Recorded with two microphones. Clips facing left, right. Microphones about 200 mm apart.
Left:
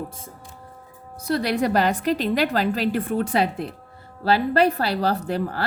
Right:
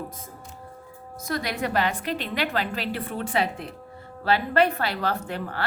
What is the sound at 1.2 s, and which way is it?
A woman's voice, 35° left (ahead or behind).